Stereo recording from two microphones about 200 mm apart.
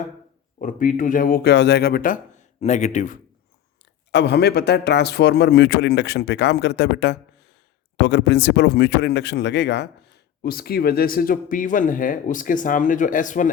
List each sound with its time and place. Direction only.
0.6 s speech: 40° left (ahead or behind)
4.1 s a man's voice: 60° left (ahead or behind); by 13.5 s 40° left (ahead or behind)